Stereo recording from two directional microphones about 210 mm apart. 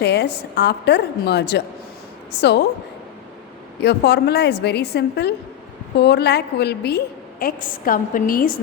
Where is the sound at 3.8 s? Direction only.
55° left (ahead or behind).